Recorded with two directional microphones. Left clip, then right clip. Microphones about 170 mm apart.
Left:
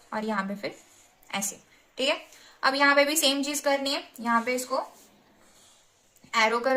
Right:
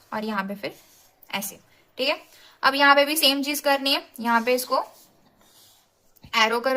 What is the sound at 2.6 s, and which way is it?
A woman's voice, 15° right (ahead or behind).